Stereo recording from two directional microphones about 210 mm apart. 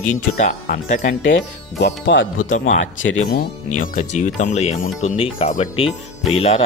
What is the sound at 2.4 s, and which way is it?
Speech, 35° left (ahead or behind).